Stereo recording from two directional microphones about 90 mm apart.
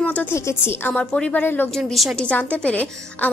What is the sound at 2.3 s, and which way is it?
A woman's voice, 15° left (ahead or behind).